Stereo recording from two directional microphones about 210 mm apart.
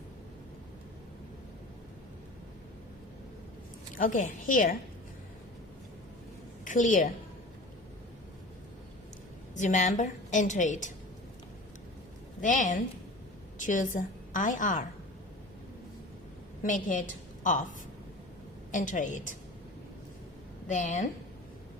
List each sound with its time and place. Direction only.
3.9 s a woman's voice: 40° left (ahead or behind)
6.7 s a woman's voice: 40° left (ahead or behind)
9.6 s a woman's voice: 35° left (ahead or behind)
12.4 s a woman's voice: 35° left (ahead or behind)
16.6 s a woman's voice: 35° left (ahead or behind)
18.7 s a woman's voice: 35° left (ahead or behind)
20.7 s a woman's voice: 35° left (ahead or behind)